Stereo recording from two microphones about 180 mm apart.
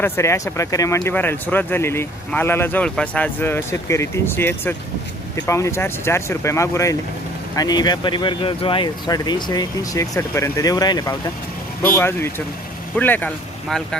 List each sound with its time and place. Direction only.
0.0 s speech: 15° left (ahead or behind)